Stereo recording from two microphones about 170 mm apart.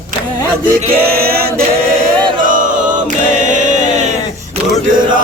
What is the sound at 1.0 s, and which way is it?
Male singing, 65° right (ahead or behind).